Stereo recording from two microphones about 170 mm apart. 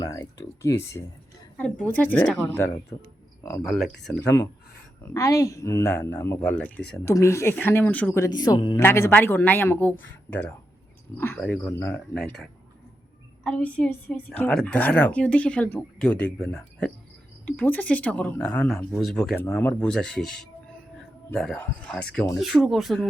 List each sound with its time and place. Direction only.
0.0 s a woman's voice: 20° left (ahead or behind)
3.6 s speech: centre (ahead or behind)
5.0 s a woman's voice: 20° left (ahead or behind)
8.8 s a woman's voice: 15° left (ahead or behind)